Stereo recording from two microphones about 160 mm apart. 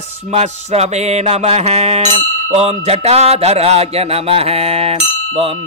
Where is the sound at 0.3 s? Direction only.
40° right (ahead or behind).